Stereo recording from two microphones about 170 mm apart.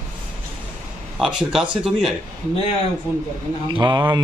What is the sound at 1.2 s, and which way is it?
Speech, centre (ahead or behind).